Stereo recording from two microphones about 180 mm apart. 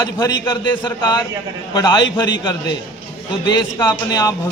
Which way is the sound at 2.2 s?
25° left (ahead or behind).